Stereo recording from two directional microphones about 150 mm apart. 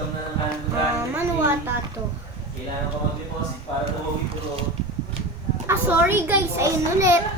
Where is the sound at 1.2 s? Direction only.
15° right (ahead or behind).